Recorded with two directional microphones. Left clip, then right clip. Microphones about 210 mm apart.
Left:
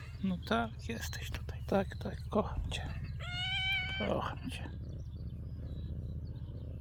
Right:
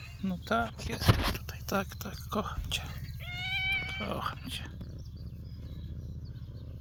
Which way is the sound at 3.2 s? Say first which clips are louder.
Right 2 dB; 15° left (ahead or behind).